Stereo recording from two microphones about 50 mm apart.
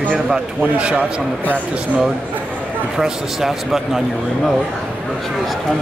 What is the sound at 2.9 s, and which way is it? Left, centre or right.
A man's voice, centre.